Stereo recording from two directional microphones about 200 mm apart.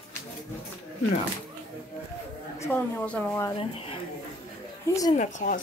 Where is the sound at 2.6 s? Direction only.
10° left (ahead or behind).